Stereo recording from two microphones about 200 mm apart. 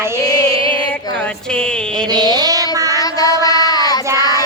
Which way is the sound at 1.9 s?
20° right (ahead or behind).